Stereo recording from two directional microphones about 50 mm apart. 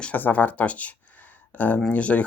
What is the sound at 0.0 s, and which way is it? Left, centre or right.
Speech, left.